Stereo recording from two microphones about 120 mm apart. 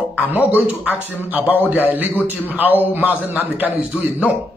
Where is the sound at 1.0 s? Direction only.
15° left (ahead or behind).